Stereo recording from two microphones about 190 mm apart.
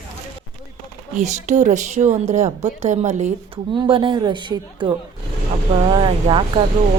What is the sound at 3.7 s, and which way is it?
Speech, 25° right (ahead or behind).